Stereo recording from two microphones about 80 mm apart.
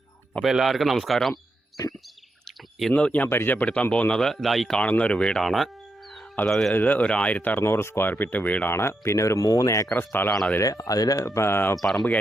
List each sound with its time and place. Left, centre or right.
0.4 s speech: centre
1.8 s speech: left
2.9 s speech: centre
4.1 s speech: centre
4.8 s speech: centre
5.4 s speech: centre
6.7 s speech: left
8.7 s speech: left
9.9 s speech: left
10.6 s speech: left
11.8 s speech: centre